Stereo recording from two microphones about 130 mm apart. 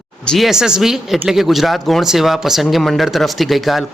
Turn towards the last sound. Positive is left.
turn(degrees=0)  # may be behind; listen again after turning